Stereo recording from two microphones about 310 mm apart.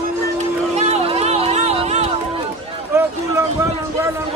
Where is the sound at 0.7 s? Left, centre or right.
Centre.